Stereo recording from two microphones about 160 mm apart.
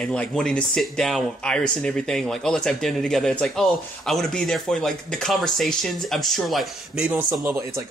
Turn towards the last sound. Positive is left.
turn(degrees=-15)  # may be behind; listen again after turning